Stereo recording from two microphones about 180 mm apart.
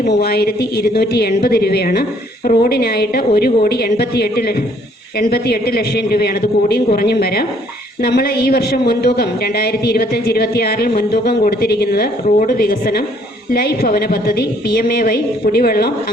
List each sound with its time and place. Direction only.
0.1 s a woman's voice: 60° left (ahead or behind)